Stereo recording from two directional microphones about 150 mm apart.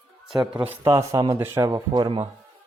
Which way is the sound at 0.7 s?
20° right (ahead or behind).